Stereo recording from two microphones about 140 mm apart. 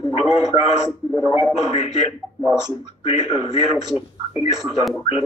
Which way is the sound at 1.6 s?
50° left (ahead or behind).